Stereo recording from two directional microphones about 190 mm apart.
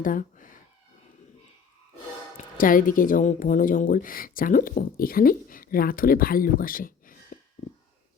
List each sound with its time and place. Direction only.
0.0 s cat: 45° left (ahead or behind)
2.6 s a woman's voice: 45° left (ahead or behind)